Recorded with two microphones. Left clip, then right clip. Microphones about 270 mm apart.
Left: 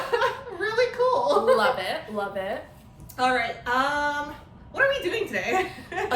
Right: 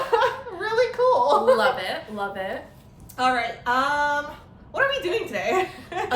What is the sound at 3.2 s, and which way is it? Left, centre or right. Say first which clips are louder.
A woman's voice: right 1 dB; centre.